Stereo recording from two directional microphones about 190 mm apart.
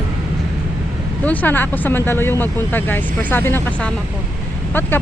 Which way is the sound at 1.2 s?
10° left (ahead or behind).